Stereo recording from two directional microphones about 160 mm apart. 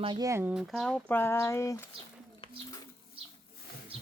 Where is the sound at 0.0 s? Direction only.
30° right (ahead or behind).